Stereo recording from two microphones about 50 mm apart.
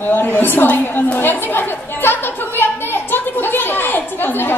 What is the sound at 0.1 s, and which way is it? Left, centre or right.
A woman's voice, left.